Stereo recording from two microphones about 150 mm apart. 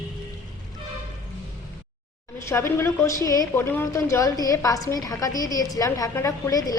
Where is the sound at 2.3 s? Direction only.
20° left (ahead or behind).